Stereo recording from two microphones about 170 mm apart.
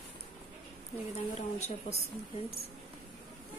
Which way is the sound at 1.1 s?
40° left (ahead or behind).